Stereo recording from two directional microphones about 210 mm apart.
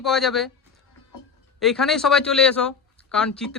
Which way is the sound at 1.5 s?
Centre (ahead or behind).